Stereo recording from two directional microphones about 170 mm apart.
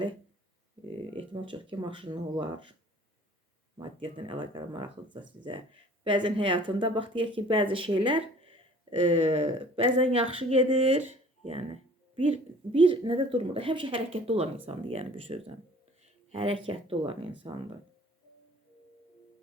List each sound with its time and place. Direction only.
1.1 s speech: 30° right (ahead or behind)
3.8 s speech: 30° right (ahead or behind)